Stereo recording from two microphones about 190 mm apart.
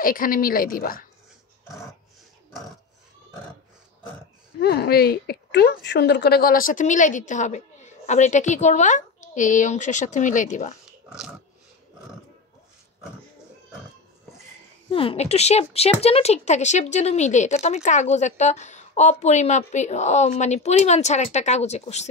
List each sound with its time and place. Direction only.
0.0 s a woman's voice: 45° left (ahead or behind)
4.6 s a woman's voice: 60° left (ahead or behind); by 10.8 s 40° left (ahead or behind)
10.9 s a sound: 5° right (ahead or behind)
14.9 s a woman's voice: 30° left (ahead or behind)